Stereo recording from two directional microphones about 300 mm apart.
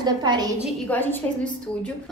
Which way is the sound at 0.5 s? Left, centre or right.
Centre.